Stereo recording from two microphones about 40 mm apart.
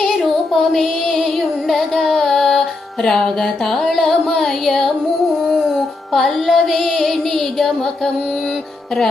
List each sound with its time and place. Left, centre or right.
0.0 s music: centre
3.0 s music: centre